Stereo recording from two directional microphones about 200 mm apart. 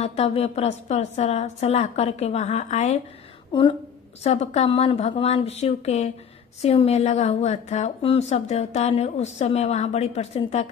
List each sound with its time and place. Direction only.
0.0 s a woman's voice: 30° left (ahead or behind)
3.5 s a woman's voice: 25° left (ahead or behind)
4.2 s a woman's voice: 35° left (ahead or behind)